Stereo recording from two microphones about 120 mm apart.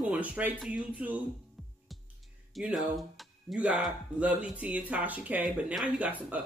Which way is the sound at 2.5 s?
5° right (ahead or behind).